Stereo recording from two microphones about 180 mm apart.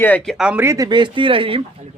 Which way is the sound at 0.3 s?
5° right (ahead or behind).